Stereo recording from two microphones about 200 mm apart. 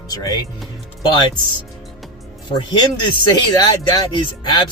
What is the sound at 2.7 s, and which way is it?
Speech, 20° left (ahead or behind).